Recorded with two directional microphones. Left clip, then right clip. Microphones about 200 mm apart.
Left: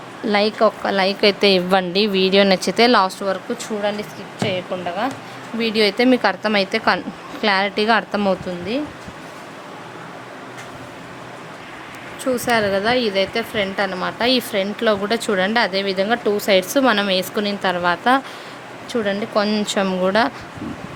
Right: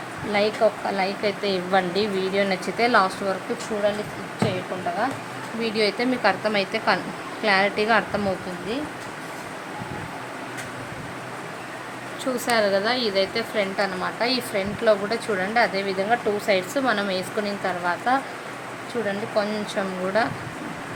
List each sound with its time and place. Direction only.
0.3 s speech: 45° left (ahead or behind)
5.5 s a woman's voice: 45° left (ahead or behind)
12.2 s a woman's voice: 40° left (ahead or behind)
19.3 s speech: 55° left (ahead or behind)